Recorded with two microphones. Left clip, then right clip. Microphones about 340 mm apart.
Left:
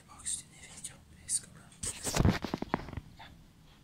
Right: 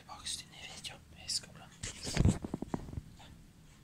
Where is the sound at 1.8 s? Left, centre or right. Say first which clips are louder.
Left 4 dB; left.